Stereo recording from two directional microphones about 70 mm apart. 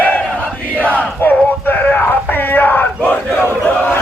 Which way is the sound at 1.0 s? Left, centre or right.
Left.